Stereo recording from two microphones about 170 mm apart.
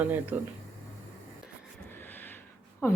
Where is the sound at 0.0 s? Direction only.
10° right (ahead or behind).